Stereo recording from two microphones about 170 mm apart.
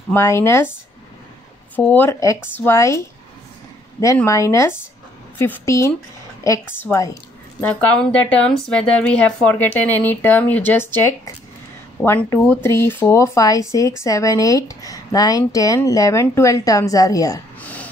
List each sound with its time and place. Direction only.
0.1 s a woman's voice: 15° left (ahead or behind)
1.8 s a woman's voice: 10° left (ahead or behind)
4.2 s a woman's voice: 15° left (ahead or behind)
17.6 s burping: 10° left (ahead or behind)